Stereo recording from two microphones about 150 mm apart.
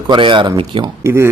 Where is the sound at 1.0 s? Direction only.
20° right (ahead or behind).